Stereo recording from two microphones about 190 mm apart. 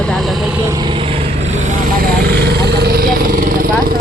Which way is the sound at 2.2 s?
55° right (ahead or behind).